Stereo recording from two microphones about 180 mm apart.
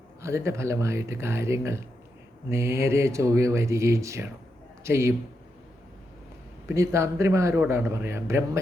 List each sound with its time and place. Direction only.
0.2 s a man's voice: 15° right (ahead or behind)
6.7 s a man's voice: 15° right (ahead or behind)